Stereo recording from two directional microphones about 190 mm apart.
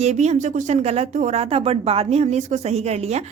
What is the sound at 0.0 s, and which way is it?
Speech, 35° right (ahead or behind).